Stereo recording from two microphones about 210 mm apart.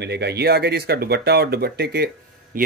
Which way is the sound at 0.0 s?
50° right (ahead or behind).